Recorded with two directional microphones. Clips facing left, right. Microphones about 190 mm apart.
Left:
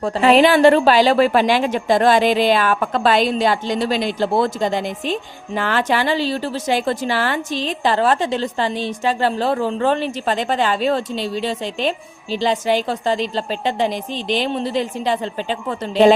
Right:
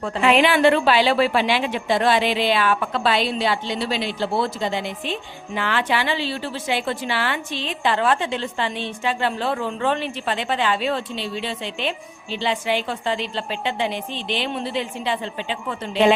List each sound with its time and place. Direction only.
0.0 s a woman's voice: 40° left (ahead or behind)